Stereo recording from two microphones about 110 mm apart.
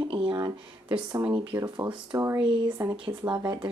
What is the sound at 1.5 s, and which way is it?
Speech, 40° right (ahead or behind).